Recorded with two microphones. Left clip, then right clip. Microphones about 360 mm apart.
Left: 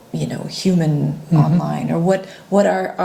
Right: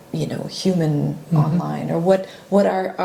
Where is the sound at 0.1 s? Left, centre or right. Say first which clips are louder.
Even; centre.